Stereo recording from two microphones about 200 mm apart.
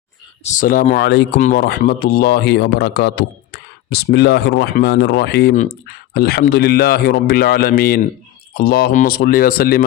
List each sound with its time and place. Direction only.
0.4 s speech: 40° left (ahead or behind); by 1.3 s 55° left (ahead or behind)
1.4 s speech: 45° left (ahead or behind)